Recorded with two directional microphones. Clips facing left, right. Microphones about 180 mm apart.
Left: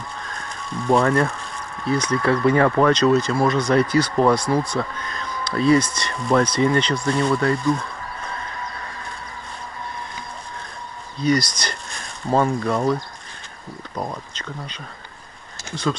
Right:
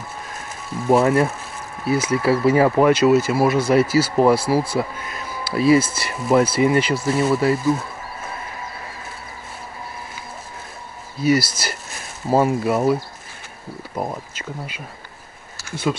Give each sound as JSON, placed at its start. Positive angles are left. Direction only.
{"t": 0.7, "sound": "speech", "side_deg": -5}
{"t": 11.1, "sound": "speech", "side_deg": -5}
{"t": 14.0, "sound": "speech", "side_deg": -25}
{"t": 15.7, "sound": "speech", "side_deg": -5}